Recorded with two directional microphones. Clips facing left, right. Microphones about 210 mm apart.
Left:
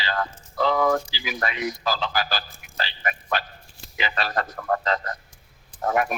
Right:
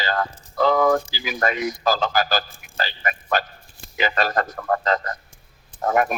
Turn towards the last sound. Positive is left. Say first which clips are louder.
# right 3 dB
turn(degrees=-45)  # may be behind; listen again after turning